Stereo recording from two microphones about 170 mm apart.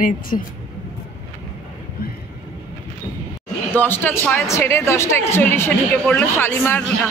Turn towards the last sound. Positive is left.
turn(degrees=10)  # may be behind; listen again after turning